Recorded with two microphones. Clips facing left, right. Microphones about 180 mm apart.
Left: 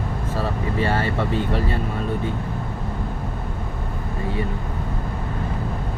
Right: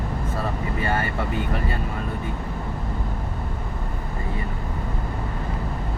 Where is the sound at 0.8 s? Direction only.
30° left (ahead or behind).